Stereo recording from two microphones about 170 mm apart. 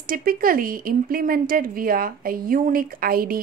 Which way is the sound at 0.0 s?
55° right (ahead or behind).